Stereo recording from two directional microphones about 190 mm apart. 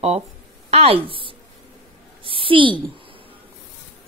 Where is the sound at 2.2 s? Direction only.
25° right (ahead or behind).